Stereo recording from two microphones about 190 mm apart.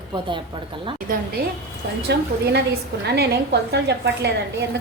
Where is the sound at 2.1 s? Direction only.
60° right (ahead or behind).